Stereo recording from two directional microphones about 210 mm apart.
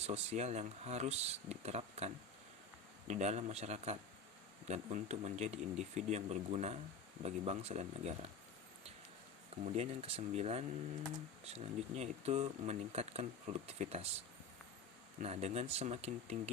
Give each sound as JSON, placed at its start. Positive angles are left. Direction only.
{"t": 0.0, "sound": "speech", "side_deg": -30}
{"t": 9.6, "sound": "speech", "side_deg": -30}
{"t": 15.2, "sound": "speech", "side_deg": -30}